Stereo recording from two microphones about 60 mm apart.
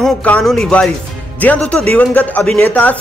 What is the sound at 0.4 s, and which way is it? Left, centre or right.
Speech, centre.